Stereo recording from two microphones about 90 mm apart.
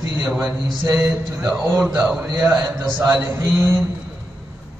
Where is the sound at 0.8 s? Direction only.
35° right (ahead or behind).